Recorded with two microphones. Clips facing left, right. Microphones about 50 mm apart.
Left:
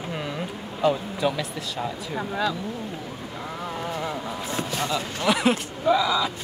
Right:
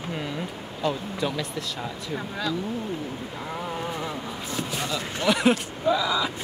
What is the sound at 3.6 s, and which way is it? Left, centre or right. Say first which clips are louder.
Vehicle: left 3 dB; centre.